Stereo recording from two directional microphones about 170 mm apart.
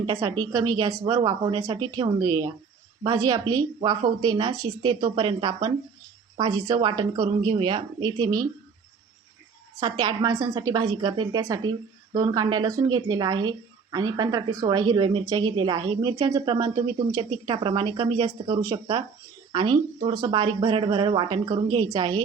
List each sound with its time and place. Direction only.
0.0 s a woman's voice: 20° right (ahead or behind)
9.8 s a woman's voice: 25° right (ahead or behind)